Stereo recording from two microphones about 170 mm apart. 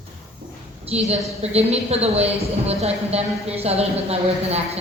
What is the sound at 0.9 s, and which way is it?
A woman's voice, 40° right (ahead or behind).